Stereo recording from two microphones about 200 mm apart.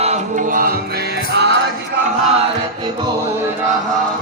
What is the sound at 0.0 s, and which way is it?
Music, 35° right (ahead or behind).